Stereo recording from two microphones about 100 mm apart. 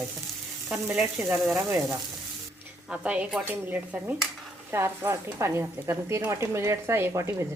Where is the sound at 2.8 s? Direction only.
10° right (ahead or behind).